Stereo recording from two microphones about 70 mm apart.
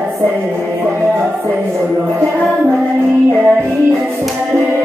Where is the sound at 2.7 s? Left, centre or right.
Right.